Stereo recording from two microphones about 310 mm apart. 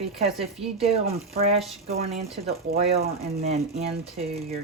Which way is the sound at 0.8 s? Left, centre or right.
Centre.